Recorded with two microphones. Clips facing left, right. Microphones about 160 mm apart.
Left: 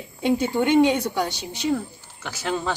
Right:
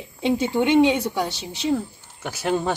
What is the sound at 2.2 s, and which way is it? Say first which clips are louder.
Speech: right 3 dB; 15° right (ahead or behind).